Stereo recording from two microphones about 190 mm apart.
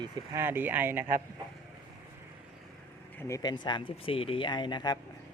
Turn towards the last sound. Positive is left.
turn(degrees=25)  # may be behind; listen again after turning